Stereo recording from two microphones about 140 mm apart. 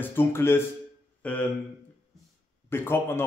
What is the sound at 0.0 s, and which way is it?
A man's voice, 15° left (ahead or behind).